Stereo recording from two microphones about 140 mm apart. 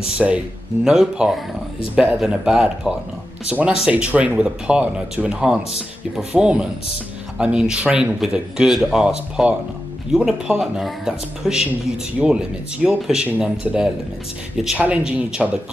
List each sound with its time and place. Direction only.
0.2 s speech: 5° right (ahead or behind)